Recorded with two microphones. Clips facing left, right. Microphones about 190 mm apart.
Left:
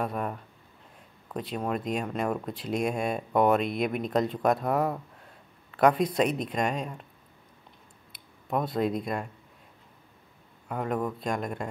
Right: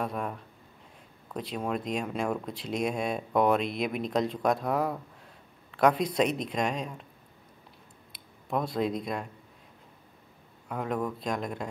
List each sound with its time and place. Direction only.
0.0 s speech: 5° left (ahead or behind)
8.5 s speech: 5° left (ahead or behind)
10.7 s speech: centre (ahead or behind)